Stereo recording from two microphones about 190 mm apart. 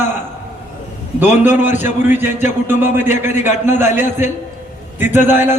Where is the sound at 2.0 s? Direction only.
10° right (ahead or behind).